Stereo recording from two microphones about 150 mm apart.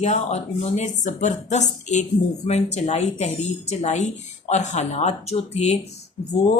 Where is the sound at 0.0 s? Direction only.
45° left (ahead or behind).